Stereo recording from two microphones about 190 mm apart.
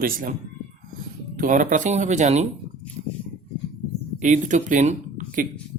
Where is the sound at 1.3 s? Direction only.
45° right (ahead or behind).